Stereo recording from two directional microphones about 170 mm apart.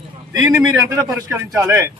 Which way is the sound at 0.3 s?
15° right (ahead or behind).